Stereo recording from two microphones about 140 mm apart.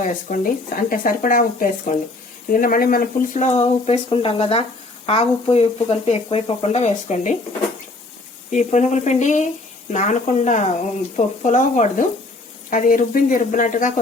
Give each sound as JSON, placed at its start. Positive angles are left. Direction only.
{"t": 0.0, "sound": "speech", "side_deg": 75}
{"t": 2.5, "sound": "speech", "side_deg": 90}
{"t": 8.4, "sound": "speech", "side_deg": 60}
{"t": 12.7, "sound": "speech", "side_deg": 70}